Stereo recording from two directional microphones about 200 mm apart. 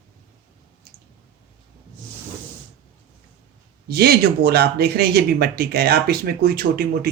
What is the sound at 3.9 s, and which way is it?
Speech, 50° right (ahead or behind).